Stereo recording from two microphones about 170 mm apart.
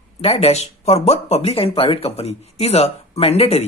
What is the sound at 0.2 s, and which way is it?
Speech, 35° left (ahead or behind).